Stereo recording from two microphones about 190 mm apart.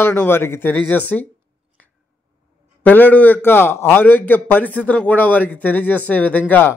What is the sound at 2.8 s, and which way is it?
Speech, 10° left (ahead or behind).